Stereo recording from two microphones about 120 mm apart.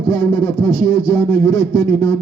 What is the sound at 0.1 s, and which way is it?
A man's voice, 25° left (ahead or behind).